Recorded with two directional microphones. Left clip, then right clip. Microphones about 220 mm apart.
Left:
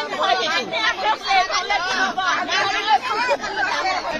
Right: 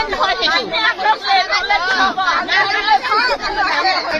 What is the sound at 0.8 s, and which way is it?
Chatter, 30° left (ahead or behind).